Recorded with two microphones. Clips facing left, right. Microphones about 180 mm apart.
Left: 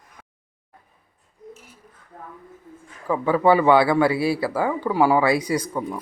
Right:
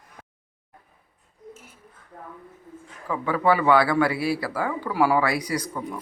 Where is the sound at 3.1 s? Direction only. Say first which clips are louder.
Left 4 dB; 30° left (ahead or behind).